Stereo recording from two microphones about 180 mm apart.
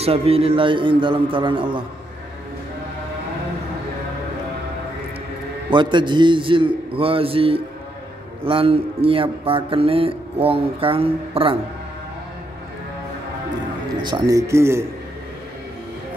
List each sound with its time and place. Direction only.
0.0 s a man's voice: 35° right (ahead or behind)
5.7 s a man's voice: 25° right (ahead or behind)
14.0 s speech: 20° right (ahead or behind)